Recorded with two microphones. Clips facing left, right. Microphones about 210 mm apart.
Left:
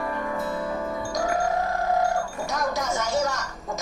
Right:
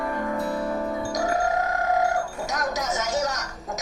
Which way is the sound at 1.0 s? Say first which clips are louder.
Right 1 dB; 20° right (ahead or behind).